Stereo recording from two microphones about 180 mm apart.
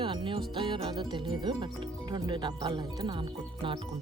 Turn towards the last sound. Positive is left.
turn(degrees=-25)  # may be behind; listen again after turning